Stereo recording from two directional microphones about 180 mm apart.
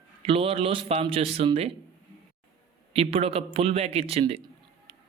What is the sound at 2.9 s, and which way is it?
Speech, 35° right (ahead or behind).